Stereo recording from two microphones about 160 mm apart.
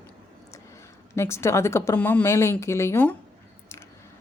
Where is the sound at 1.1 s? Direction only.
15° left (ahead or behind).